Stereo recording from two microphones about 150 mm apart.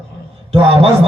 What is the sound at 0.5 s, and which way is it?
Speech, 40° right (ahead or behind).